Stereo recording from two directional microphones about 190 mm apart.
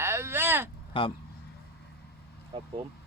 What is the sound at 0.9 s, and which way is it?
Speech, 25° left (ahead or behind).